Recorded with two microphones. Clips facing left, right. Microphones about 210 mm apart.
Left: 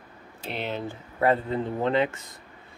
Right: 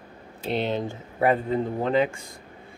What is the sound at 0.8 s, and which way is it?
Speech, 15° right (ahead or behind).